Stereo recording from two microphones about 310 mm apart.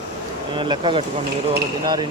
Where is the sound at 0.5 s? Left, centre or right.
Centre.